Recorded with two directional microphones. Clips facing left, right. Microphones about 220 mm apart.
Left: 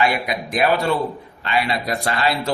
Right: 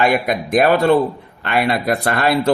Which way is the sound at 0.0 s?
50° right (ahead or behind).